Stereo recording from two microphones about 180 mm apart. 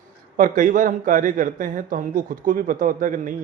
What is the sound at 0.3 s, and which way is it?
A man's voice, 50° right (ahead or behind).